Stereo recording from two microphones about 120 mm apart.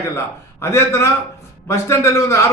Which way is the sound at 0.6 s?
25° left (ahead or behind).